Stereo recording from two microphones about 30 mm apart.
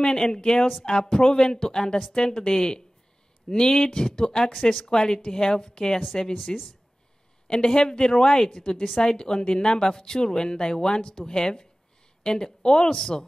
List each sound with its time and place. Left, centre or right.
0.0 s a woman's voice: left